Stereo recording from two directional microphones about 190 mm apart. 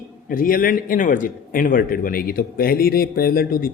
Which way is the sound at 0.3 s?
50° left (ahead or behind).